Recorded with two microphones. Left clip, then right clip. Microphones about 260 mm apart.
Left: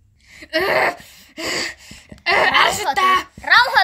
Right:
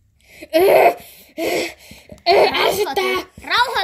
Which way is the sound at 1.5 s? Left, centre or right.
Left.